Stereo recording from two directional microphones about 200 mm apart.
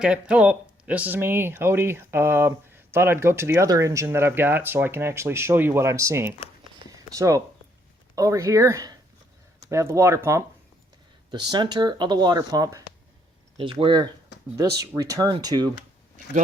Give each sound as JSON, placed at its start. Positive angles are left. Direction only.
{"t": 0.0, "sound": "speech", "side_deg": -5}
{"t": 6.9, "sound": "a sound", "side_deg": -15}
{"t": 8.1, "sound": "speech", "side_deg": -15}